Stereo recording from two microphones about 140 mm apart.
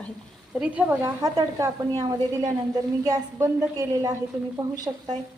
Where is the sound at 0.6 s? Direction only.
10° right (ahead or behind).